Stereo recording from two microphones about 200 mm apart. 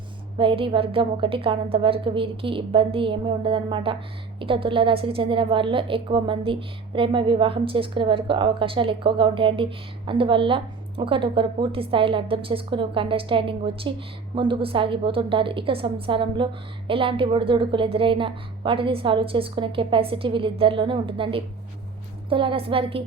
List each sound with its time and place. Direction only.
0.3 s a woman's voice: 25° right (ahead or behind)